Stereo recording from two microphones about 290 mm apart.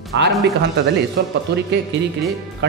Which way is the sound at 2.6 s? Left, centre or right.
Right.